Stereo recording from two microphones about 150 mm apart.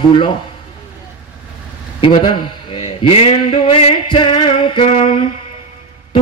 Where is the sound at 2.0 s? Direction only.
30° left (ahead or behind).